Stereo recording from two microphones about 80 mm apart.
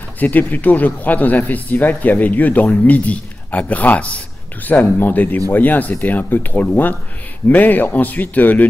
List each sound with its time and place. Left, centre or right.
0.2 s speech: left